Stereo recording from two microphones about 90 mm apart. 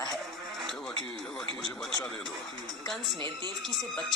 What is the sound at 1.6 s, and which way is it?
Speech, 5° left (ahead or behind).